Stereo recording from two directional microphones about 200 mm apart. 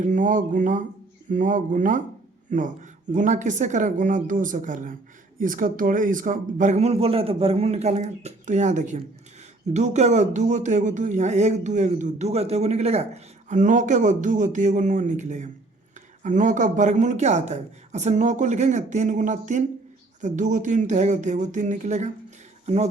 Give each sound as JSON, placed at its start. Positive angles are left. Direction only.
{"t": 0.0, "sound": "speech", "side_deg": -40}